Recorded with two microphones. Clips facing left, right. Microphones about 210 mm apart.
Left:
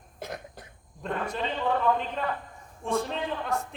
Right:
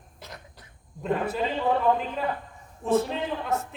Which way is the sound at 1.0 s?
5° right (ahead or behind).